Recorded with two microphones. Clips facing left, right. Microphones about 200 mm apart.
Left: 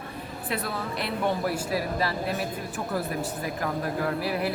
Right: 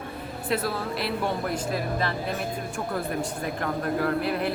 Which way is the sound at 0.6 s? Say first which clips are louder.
Right 3 dB; centre (ahead or behind).